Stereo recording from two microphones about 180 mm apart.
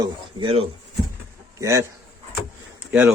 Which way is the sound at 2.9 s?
5° right (ahead or behind).